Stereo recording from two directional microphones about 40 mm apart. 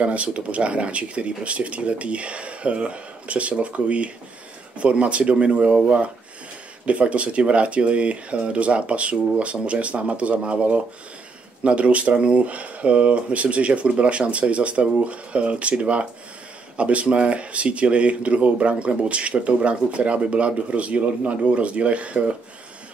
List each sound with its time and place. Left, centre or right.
0.0 s speech: right
6.9 s speech: right